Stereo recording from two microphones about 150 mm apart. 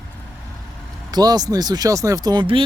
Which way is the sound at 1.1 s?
25° right (ahead or behind).